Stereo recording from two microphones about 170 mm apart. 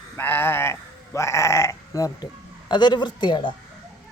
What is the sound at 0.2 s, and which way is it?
A man's voice, 10° left (ahead or behind).